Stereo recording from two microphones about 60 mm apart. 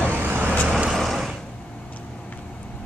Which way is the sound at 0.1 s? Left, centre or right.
Right.